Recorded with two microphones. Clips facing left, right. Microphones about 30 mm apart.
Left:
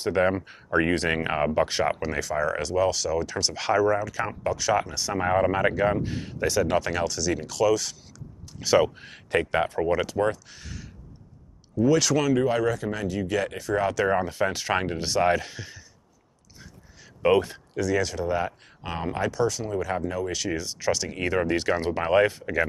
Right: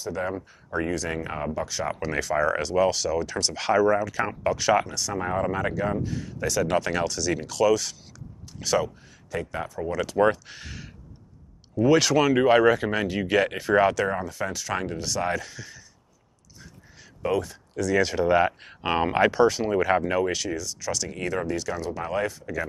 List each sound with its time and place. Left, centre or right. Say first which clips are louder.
0.0 s speech: left 6 dB; left
2.1 s speech: right 2 dB; centre
4.9 s speech: left 3 dB; centre
6.6 s speech: right 2 dB; centre
9.0 s speech: left 7 dB; left
9.4 s speech: left 7 dB; left
10.1 s speech: right 4 dB; right
12.4 s speech: right 5 dB; right
14.1 s speech: left 5 dB; left
17.2 s speech: left 5 dB; left
18.0 s speech: right 6 dB; right
20.5 s speech: left 3 dB; left
21.5 s speech: left 4 dB; left